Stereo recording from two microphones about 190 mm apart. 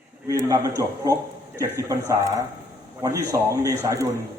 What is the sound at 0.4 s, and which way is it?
A man's voice, 15° right (ahead or behind).